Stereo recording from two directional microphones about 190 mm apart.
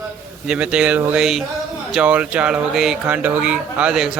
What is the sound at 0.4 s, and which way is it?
A man's voice, 5° right (ahead or behind).